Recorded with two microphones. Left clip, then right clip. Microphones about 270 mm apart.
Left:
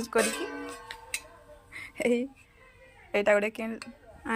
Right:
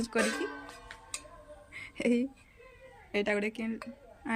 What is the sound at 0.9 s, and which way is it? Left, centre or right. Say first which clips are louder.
Music: left 6 dB; left.